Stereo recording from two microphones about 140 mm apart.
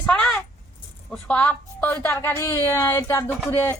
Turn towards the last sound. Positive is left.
turn(degrees=20)  # may be behind; listen again after turning